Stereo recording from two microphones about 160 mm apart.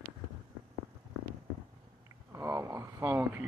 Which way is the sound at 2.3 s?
20° right (ahead or behind).